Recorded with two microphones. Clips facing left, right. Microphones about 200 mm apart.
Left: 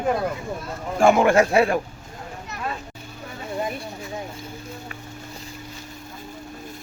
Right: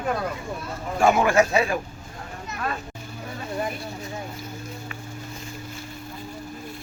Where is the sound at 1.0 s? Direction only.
55° left (ahead or behind).